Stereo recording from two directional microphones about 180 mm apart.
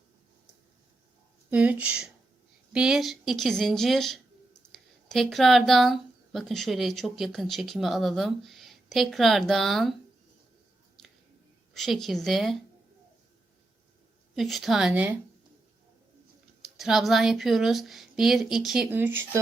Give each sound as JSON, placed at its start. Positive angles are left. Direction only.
{"t": 1.5, "sound": "speech", "side_deg": -10}
{"t": 11.7, "sound": "speech", "side_deg": 0}
{"t": 14.3, "sound": "speech", "side_deg": 0}
{"t": 16.6, "sound": "speech", "side_deg": 0}